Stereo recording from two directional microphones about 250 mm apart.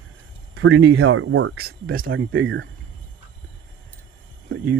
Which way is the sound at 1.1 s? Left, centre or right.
Right.